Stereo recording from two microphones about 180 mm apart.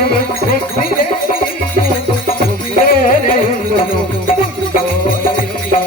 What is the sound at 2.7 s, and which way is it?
Music, 50° left (ahead or behind).